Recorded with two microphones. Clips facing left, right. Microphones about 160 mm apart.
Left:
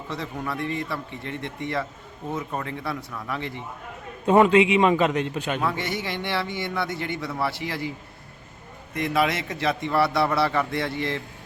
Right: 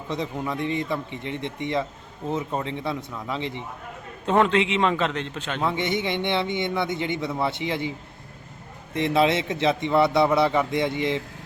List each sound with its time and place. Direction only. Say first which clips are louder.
0.1 s a man's voice: right 3 dB; 20° right (ahead or behind)
4.3 s a man's voice: left 4 dB; 10° left (ahead or behind)
5.6 s a man's voice: right 3 dB; 20° right (ahead or behind)
9.0 s a man's voice: right 3 dB; 25° right (ahead or behind)